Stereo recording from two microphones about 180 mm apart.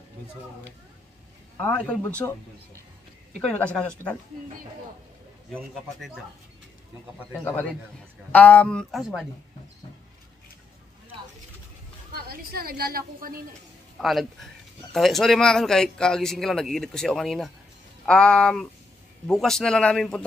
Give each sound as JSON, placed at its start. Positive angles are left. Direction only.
{"t": 1.6, "sound": "speech", "side_deg": 5}
{"t": 3.3, "sound": "speech", "side_deg": 5}
{"t": 5.5, "sound": "speech", "side_deg": 0}
{"t": 7.3, "sound": "speech", "side_deg": 10}
{"t": 12.3, "sound": "a woman's voice", "side_deg": -55}
{"t": 13.9, "sound": "speech", "side_deg": 0}